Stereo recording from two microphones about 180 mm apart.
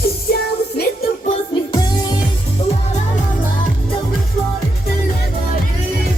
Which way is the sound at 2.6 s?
35° left (ahead or behind).